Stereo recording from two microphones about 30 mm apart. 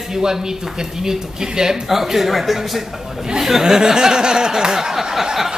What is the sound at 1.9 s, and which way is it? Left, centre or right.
Speech, centre.